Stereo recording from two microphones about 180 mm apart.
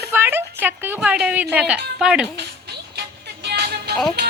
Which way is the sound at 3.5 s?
65° right (ahead or behind).